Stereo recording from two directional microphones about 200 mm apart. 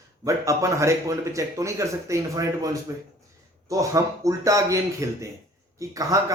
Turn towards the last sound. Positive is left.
turn(degrees=-15)  # may be behind; listen again after turning